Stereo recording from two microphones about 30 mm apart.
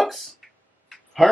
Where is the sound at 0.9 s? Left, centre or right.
Centre.